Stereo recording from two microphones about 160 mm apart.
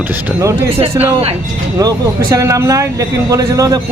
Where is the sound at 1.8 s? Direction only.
20° right (ahead or behind).